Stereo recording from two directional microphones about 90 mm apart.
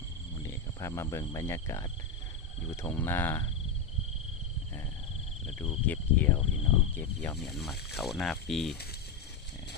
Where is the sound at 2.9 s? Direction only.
25° left (ahead or behind).